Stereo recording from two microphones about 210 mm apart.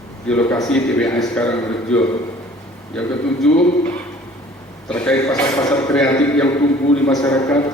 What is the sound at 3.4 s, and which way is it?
Speech, 5° left (ahead or behind).